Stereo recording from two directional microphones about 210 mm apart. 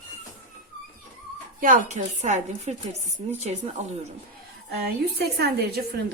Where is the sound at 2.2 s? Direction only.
35° right (ahead or behind).